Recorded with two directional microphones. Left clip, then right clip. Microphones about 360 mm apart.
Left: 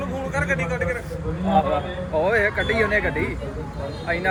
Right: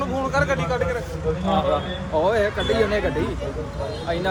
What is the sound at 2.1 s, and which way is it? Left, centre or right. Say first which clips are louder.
Speech: even; centre.